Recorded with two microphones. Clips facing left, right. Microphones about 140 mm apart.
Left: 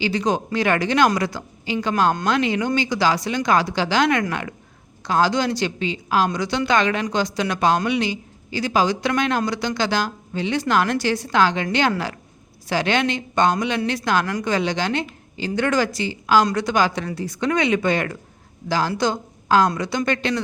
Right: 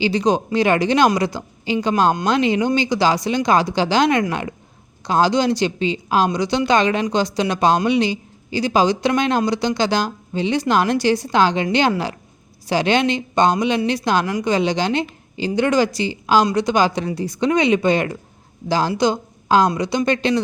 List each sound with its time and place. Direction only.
0.0 s a woman's voice: 20° right (ahead or behind)